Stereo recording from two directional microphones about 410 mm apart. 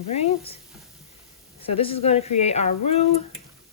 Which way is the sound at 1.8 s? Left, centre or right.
Centre.